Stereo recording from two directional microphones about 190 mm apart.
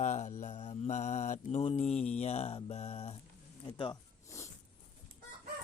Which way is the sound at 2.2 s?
35° left (ahead or behind).